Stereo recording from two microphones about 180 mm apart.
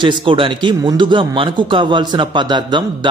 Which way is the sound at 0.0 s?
30° right (ahead or behind).